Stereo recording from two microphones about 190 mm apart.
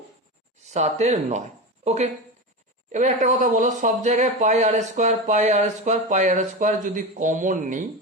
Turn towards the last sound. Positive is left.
turn(degrees=-40)  # may be behind; listen again after turning